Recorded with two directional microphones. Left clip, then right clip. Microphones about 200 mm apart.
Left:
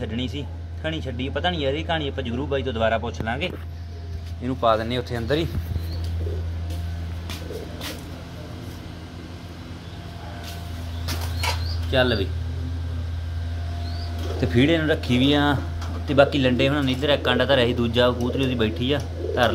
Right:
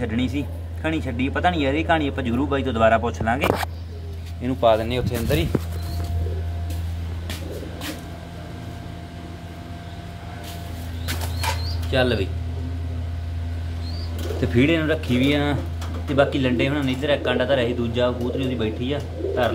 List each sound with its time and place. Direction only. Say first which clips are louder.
0.0 s speech: right 4 dB; 5° left (ahead or behind)
11.9 s speech: even; 5° left (ahead or behind)
14.4 s speech: even; 15° left (ahead or behind); by 19.5 s 35° left (ahead or behind)